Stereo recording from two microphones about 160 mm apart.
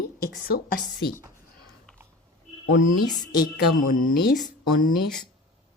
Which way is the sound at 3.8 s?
60° left (ahead or behind).